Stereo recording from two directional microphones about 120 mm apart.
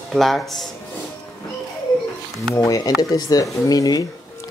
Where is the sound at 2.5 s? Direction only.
30° left (ahead or behind).